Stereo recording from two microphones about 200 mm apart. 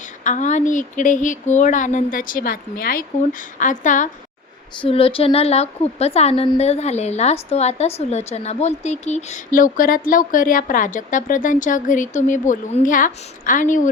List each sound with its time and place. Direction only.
0.0 s a woman's voice: 40° left (ahead or behind)
4.8 s a woman's voice: 30° left (ahead or behind)